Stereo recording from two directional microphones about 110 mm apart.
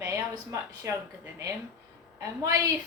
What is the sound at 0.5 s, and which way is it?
A woman's voice, 25° right (ahead or behind).